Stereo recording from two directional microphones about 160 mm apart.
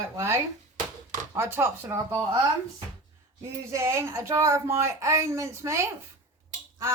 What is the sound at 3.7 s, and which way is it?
Speech, 20° right (ahead or behind).